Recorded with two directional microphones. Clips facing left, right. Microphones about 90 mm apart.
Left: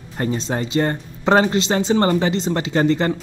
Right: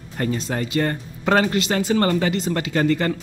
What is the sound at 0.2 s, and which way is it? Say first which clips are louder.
Speech: left 2 dB; 25° left (ahead or behind).